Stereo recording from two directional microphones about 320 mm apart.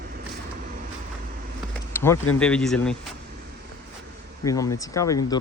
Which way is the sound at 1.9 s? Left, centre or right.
Centre.